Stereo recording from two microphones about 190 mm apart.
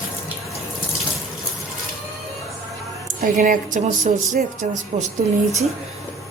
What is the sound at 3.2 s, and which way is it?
A woman's voice, 45° right (ahead or behind).